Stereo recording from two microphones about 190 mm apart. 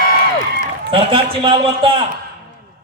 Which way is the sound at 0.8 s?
25° right (ahead or behind).